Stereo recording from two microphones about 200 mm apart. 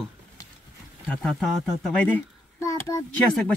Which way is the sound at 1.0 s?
Centre (ahead or behind).